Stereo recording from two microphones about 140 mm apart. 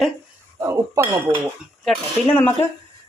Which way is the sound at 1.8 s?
10° left (ahead or behind).